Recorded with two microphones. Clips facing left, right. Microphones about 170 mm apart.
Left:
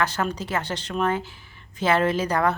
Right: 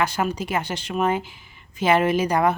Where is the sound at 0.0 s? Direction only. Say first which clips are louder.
Right 2 dB; 10° right (ahead or behind).